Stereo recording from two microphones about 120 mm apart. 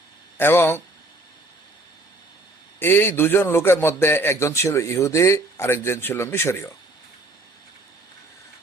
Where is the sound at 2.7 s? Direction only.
15° left (ahead or behind).